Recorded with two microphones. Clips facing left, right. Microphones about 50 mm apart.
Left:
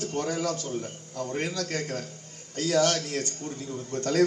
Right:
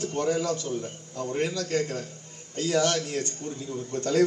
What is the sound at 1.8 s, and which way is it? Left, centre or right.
A man's voice, right.